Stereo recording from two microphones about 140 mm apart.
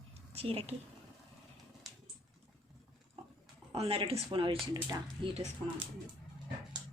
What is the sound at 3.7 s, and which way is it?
Speech, 45° right (ahead or behind).